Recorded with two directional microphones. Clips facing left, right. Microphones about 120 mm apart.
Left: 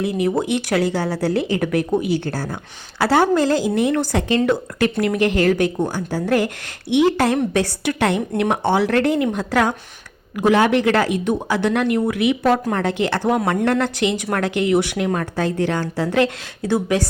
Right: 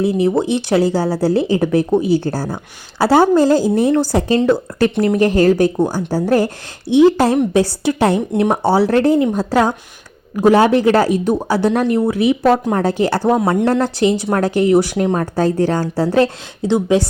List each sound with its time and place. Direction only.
0.0 s speech: 30° right (ahead or behind)
16.6 s speech: 25° right (ahead or behind)